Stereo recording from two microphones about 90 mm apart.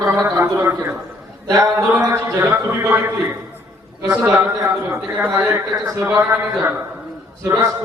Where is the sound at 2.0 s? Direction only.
30° right (ahead or behind).